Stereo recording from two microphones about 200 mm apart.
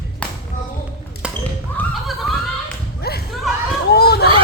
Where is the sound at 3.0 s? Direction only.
55° left (ahead or behind).